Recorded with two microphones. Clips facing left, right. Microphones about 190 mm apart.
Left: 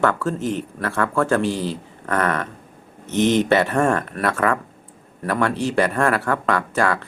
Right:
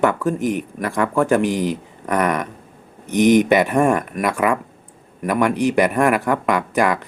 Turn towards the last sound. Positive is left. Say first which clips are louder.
# right 2 dB
turn(degrees=-15)  # may be behind; listen again after turning